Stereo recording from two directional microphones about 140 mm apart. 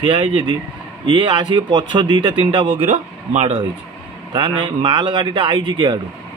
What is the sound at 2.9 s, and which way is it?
Speech, 55° right (ahead or behind).